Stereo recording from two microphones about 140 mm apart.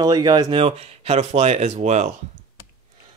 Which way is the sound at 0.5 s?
45° right (ahead or behind).